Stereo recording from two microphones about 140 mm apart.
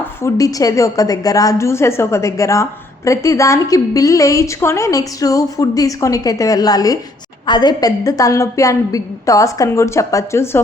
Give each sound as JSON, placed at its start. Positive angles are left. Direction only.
{"t": 0.0, "sound": "a woman's voice", "side_deg": 20}